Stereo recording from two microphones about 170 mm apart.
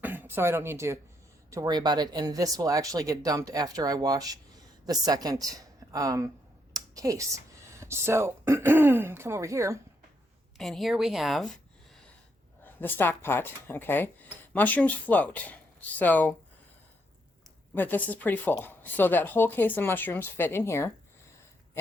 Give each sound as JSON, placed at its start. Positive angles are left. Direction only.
{"t": 0.0, "sound": "speech", "side_deg": -10}
{"t": 10.6, "sound": "speech", "side_deg": 0}
{"t": 12.6, "sound": "speech", "side_deg": 10}
{"t": 17.7, "sound": "speech", "side_deg": 10}